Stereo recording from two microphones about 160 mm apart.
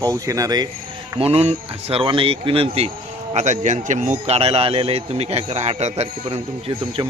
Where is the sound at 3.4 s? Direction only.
50° right (ahead or behind).